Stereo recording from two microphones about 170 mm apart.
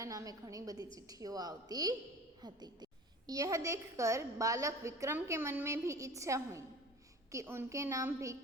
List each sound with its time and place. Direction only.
0.0 s a woman's voice: 20° right (ahead or behind)